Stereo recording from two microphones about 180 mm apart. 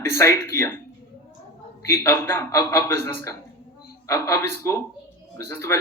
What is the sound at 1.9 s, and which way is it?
A man's voice, 15° left (ahead or behind).